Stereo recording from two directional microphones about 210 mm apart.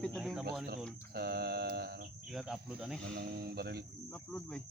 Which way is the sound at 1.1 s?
50° right (ahead or behind).